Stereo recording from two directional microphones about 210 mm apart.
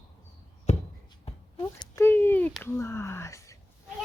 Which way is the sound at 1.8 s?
15° left (ahead or behind).